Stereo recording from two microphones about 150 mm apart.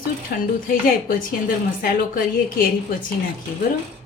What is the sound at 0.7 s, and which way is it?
Speech, 65° left (ahead or behind).